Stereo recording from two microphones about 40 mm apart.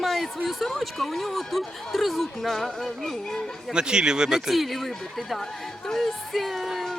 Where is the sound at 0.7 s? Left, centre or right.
Centre.